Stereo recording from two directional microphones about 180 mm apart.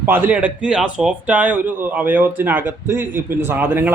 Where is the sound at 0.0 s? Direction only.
10° right (ahead or behind).